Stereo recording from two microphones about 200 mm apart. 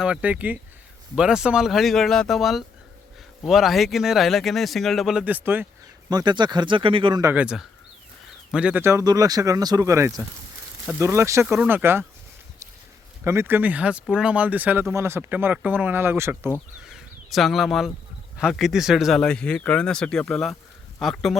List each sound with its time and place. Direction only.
0.0 s speech: 5° right (ahead or behind)
6.1 s speech: 20° right (ahead or behind)
13.2 s speech: 10° right (ahead or behind)
16.8 s a sound: centre (ahead or behind)
18.3 s speech: centre (ahead or behind)